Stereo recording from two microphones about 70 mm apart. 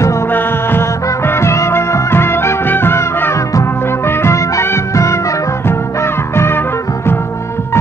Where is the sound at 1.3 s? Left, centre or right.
Left.